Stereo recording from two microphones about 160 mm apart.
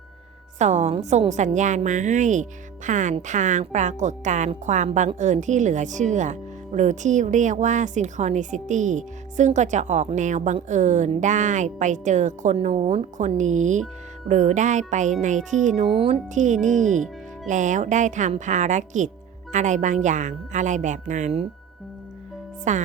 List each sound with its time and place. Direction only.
0.6 s a woman's voice: 45° right (ahead or behind)
15.9 s a woman's voice: 35° right (ahead or behind)
22.7 s a woman's voice: 50° right (ahead or behind)